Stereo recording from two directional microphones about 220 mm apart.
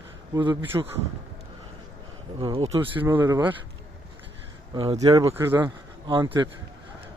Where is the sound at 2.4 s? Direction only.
25° right (ahead or behind).